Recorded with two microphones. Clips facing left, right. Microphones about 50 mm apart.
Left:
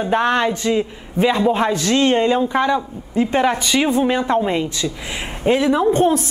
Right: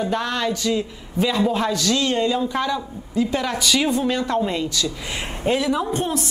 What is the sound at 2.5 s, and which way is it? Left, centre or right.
Speech, left.